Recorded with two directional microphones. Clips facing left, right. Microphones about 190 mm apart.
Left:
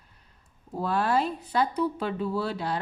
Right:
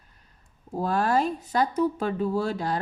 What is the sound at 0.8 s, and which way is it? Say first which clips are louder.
Speech: right 2 dB; 45° right (ahead or behind).